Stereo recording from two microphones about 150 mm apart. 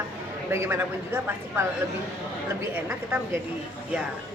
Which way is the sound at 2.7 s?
15° right (ahead or behind).